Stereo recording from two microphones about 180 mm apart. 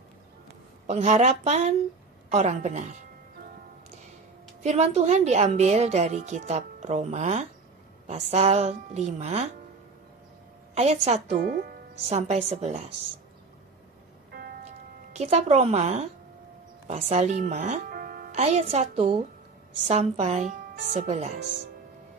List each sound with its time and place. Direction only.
0.8 s a woman's voice: 40° right (ahead or behind)
4.6 s a woman's voice: 40° right (ahead or behind)
10.7 s a woman's voice: 35° right (ahead or behind)
11.4 s speech: 55° right (ahead or behind)
12.1 s a woman's voice: 40° right (ahead or behind)
15.1 s a woman's voice: 35° right (ahead or behind); by 18.3 s 55° right (ahead or behind)
18.3 s a woman's voice: 35° right (ahead or behind)